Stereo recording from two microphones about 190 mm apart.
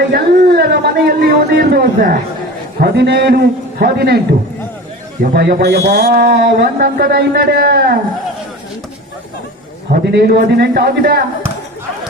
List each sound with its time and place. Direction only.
0.1 s a man's voice: 55° right (ahead or behind)
5.2 s speech: 55° right (ahead or behind)
9.9 s speech: 55° right (ahead or behind)